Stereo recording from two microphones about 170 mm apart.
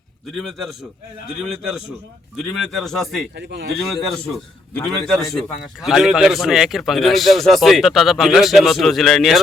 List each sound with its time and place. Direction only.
1.4 s a man's voice: centre (ahead or behind)
3.3 s speech: 75° right (ahead or behind)
4.1 s a man's voice: 5° left (ahead or behind)